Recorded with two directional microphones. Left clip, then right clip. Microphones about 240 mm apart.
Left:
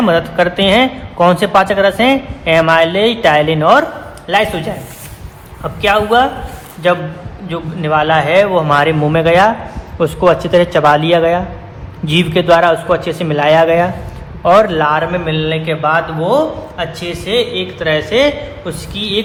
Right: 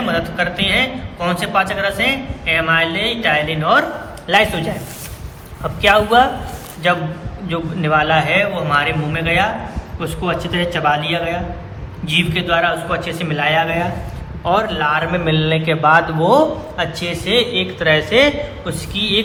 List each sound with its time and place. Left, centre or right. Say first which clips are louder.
0.1 s a woman's voice: left 7 dB; centre
10.8 s a woman's voice: left 5 dB; centre
15.1 s a man's voice: left 1 dB; centre